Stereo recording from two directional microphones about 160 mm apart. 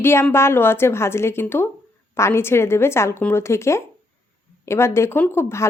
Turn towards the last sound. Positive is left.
turn(degrees=15)  # may be behind; listen again after turning